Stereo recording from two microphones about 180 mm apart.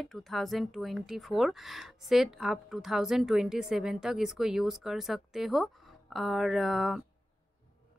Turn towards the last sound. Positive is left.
turn(degrees=0)  # may be behind; listen again after turning